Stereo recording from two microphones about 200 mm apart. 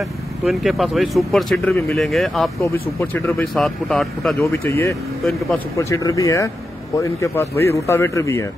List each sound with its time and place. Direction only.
0.5 s speech: centre (ahead or behind)
2.6 s speech: 10° left (ahead or behind)
4.4 s speech: 15° left (ahead or behind)